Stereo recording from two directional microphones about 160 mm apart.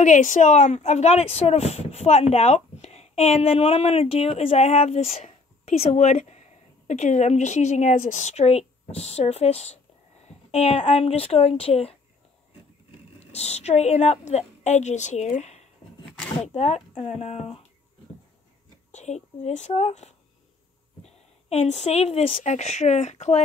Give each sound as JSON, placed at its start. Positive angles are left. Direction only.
{"t": 0.0, "sound": "speech", "side_deg": 50}
{"t": 13.2, "sound": "speech", "side_deg": 40}
{"t": 18.9, "sound": "a woman's voice", "side_deg": 45}